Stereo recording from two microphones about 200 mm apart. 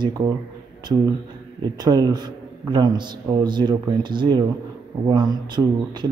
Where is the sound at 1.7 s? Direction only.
20° right (ahead or behind).